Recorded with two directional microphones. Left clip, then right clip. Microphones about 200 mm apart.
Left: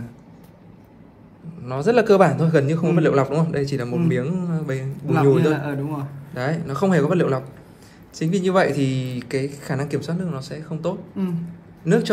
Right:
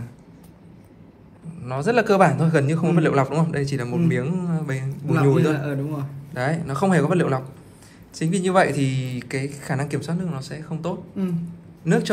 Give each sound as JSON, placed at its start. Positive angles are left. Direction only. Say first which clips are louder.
{"t": 1.6, "sound": "a man's voice", "louder": "left 2 dB", "side_deg": 5}
{"t": 5.6, "sound": "a man's voice", "louder": "left 1 dB", "side_deg": 20}
{"t": 6.3, "sound": "a man's voice", "louder": "even", "side_deg": 5}